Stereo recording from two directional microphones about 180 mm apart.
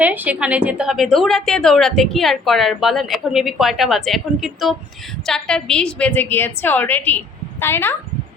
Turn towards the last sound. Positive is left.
turn(degrees=10)  # may be behind; listen again after turning